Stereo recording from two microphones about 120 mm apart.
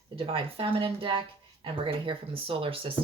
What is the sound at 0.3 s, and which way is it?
Speech, 50° right (ahead or behind).